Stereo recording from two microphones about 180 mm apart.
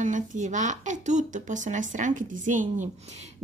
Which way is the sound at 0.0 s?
45° right (ahead or behind).